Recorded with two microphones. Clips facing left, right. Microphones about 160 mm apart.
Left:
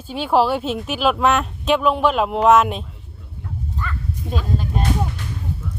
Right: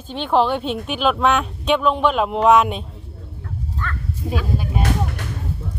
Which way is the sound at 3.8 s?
10° left (ahead or behind).